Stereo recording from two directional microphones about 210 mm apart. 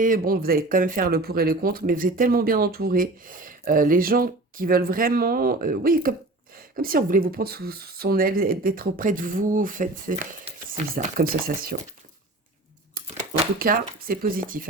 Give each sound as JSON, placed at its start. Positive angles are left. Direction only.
{"t": 0.0, "sound": "speech", "side_deg": -40}
{"t": 13.6, "sound": "speech", "side_deg": -45}